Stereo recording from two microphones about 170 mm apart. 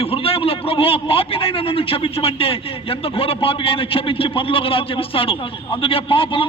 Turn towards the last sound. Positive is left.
turn(degrees=30)  # may be behind; listen again after turning